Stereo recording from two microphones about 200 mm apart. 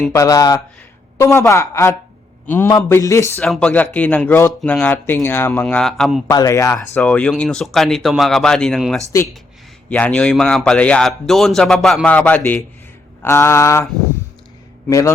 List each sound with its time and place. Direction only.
0.1 s speech: 15° left (ahead or behind); by 6.2 s centre (ahead or behind)
6.2 s a man's voice: 15° left (ahead or behind)
14.8 s a man's voice: 15° left (ahead or behind)